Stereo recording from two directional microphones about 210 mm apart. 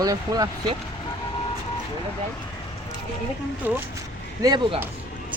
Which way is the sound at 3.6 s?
10° right (ahead or behind).